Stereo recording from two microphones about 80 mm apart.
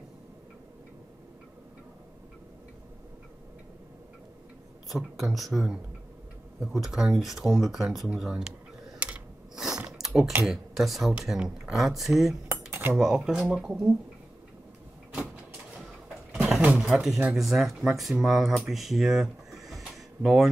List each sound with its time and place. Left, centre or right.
4.8 s speech: centre
9.6 s mechanisms: centre
10.4 s speech: centre
12.4 s cutlery: right
12.9 s speech: centre
15.7 s a sound: centre
16.7 s speech: centre
18.7 s a sound: centre